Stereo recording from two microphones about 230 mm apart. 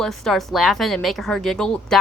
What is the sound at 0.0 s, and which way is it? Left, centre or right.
A woman's voice, centre.